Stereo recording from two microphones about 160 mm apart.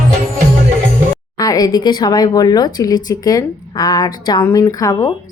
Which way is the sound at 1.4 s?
20° left (ahead or behind).